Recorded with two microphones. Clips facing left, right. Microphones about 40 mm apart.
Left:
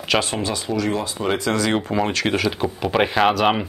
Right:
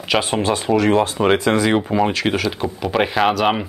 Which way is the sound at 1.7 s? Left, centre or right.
Centre.